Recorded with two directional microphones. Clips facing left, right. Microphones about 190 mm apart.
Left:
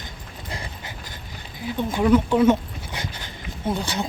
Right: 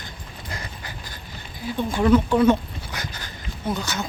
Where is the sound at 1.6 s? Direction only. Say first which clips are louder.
Even; 15° left (ahead or behind).